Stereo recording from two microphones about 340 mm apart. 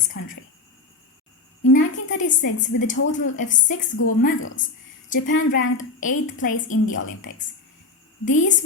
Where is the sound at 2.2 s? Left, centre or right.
Left.